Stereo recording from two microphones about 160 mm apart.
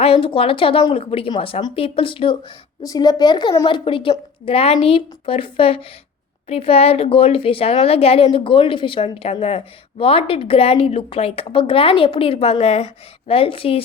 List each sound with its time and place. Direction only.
0.0 s speech: 35° left (ahead or behind)
2.8 s speech: 25° left (ahead or behind)